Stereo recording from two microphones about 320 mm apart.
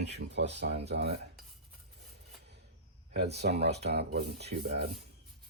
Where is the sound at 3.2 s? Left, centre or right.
Right.